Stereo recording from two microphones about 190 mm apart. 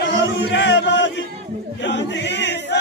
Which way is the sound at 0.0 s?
70° left (ahead or behind).